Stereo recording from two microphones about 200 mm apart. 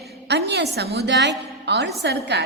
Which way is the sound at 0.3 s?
55° right (ahead or behind).